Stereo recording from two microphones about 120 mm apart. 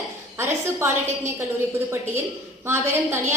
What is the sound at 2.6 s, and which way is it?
Speech, 20° right (ahead or behind).